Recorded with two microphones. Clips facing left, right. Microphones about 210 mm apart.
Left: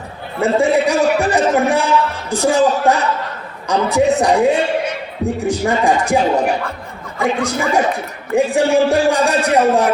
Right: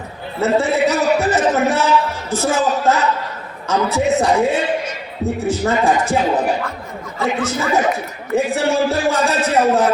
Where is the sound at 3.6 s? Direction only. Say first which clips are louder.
Left 3 dB; 15° left (ahead or behind).